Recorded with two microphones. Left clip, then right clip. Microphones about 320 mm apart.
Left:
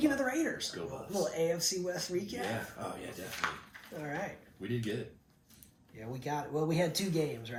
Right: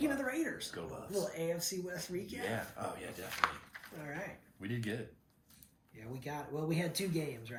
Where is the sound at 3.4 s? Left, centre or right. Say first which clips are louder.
Right 3 dB; centre.